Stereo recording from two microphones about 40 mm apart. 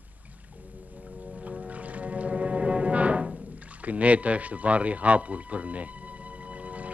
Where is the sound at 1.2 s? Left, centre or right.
Right.